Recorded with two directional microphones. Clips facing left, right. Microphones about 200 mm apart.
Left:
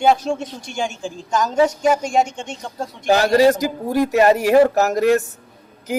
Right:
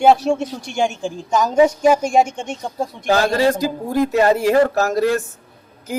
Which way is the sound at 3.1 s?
15° left (ahead or behind).